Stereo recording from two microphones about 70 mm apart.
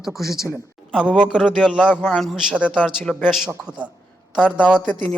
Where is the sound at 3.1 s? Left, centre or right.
Centre.